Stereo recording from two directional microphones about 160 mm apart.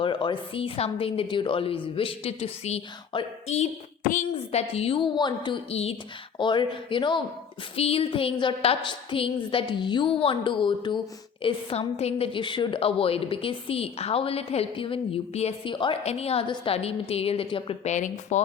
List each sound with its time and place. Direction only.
0.0 s a woman's voice: 30° left (ahead or behind)
17.9 s speech: 50° left (ahead or behind)